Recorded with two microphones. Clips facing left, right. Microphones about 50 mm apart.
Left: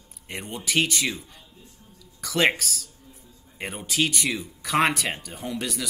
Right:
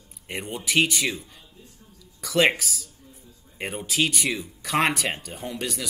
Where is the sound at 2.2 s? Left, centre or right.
Centre.